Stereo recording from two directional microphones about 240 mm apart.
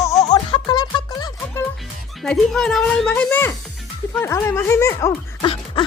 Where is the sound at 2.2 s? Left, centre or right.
Centre.